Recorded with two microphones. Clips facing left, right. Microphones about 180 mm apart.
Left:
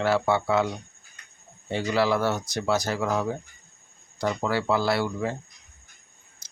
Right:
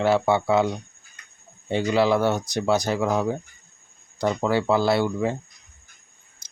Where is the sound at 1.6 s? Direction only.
20° right (ahead or behind).